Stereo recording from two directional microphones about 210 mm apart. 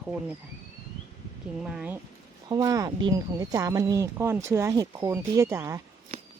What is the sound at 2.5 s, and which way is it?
Speech, 15° right (ahead or behind).